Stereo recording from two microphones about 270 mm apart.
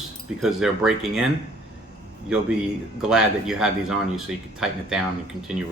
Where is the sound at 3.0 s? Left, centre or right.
Centre.